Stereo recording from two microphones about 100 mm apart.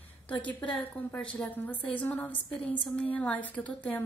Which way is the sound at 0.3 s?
15° left (ahead or behind).